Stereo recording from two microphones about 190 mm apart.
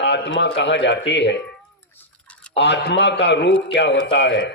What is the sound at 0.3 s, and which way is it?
Speech, 65° left (ahead or behind).